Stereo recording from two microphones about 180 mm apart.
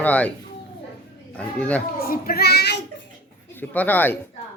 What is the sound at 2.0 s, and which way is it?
Speech, 55° left (ahead or behind).